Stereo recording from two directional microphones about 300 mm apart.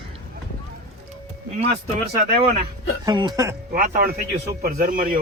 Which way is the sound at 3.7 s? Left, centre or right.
Right.